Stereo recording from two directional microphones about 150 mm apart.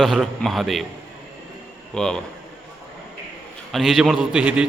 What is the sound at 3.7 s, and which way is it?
Speech, centre (ahead or behind).